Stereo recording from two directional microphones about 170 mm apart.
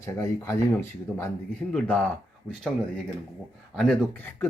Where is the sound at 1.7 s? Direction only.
5° left (ahead or behind).